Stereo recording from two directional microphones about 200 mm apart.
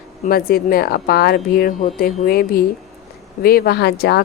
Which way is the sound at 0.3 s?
50° left (ahead or behind).